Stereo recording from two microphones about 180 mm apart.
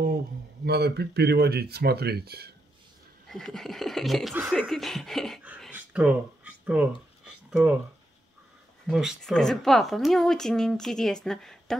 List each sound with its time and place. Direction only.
0.7 s speech: 65° right (ahead or behind)
3.3 s speech: centre (ahead or behind)
5.8 s a sound: 10° right (ahead or behind)
8.8 s speech: centre (ahead or behind)